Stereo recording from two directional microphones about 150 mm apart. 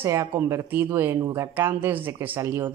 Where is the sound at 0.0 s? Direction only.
20° right (ahead or behind).